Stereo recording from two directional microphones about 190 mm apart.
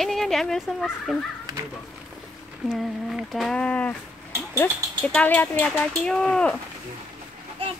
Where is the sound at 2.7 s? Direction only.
Centre (ahead or behind).